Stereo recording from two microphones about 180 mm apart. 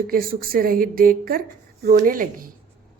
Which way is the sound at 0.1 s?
55° right (ahead or behind).